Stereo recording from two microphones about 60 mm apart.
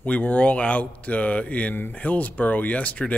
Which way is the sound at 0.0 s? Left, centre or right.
Left.